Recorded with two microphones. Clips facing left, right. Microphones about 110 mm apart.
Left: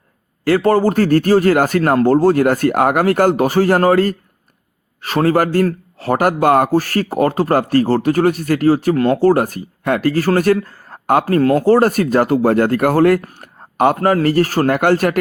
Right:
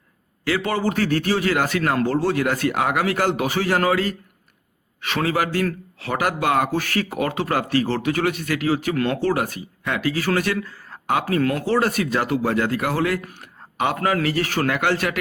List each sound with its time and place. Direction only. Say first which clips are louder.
0.4 s speech: left 9 dB; 45° left (ahead or behind)